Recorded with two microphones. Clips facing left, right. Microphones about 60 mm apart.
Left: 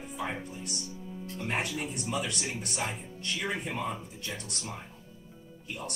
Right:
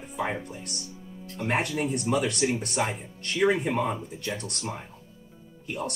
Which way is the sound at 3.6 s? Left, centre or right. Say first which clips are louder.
Right 7 dB; right.